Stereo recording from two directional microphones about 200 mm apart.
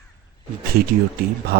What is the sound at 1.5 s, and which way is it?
Speech, 50° right (ahead or behind).